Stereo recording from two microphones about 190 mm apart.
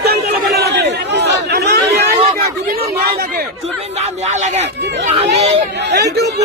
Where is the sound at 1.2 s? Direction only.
60° right (ahead or behind).